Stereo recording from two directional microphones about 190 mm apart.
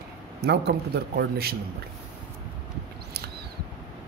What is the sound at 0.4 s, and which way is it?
A man's voice, 60° right (ahead or behind).